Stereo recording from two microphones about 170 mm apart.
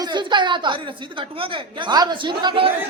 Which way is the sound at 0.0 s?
25° right (ahead or behind).